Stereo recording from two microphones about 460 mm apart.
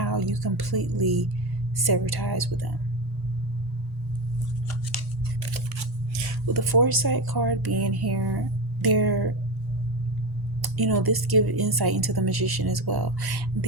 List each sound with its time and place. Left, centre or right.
0.0 s speech: right
6.2 s speech: right
10.6 s speech: right